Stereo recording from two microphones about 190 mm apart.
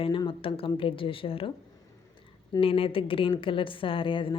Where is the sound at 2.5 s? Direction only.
30° left (ahead or behind).